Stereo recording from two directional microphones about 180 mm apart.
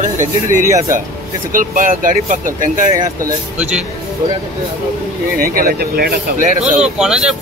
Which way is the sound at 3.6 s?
5° right (ahead or behind).